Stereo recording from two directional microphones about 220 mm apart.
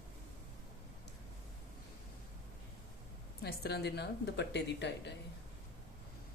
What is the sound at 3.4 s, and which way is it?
Speech, 45° left (ahead or behind).